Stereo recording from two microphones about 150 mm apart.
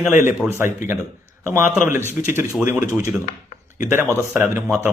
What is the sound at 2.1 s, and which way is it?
Speech, 15° right (ahead or behind).